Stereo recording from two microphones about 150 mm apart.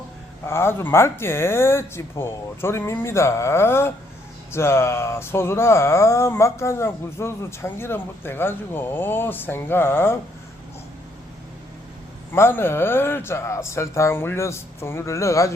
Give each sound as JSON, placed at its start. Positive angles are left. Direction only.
{"t": 0.4, "sound": "speech", "side_deg": 15}
{"t": 12.3, "sound": "speech", "side_deg": 15}